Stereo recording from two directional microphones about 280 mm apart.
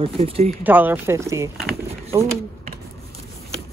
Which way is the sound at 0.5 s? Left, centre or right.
Centre.